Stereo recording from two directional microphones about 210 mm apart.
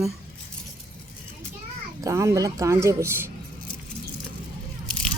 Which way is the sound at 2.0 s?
15° right (ahead or behind).